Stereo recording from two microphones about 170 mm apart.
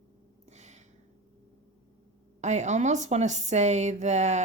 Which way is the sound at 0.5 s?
40° right (ahead or behind).